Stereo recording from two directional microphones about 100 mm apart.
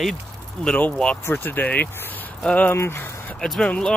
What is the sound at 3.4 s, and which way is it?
Speech, 10° left (ahead or behind).